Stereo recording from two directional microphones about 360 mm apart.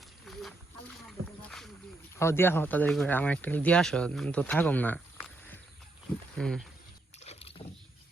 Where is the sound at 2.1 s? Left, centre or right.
Centre.